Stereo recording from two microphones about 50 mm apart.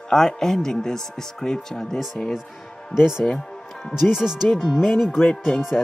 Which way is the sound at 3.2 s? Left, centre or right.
Centre.